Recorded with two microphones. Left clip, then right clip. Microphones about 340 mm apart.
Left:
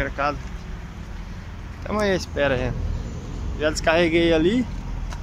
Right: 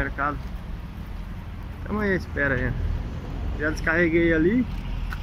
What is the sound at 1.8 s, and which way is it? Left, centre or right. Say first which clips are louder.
Speech: left 4 dB; centre.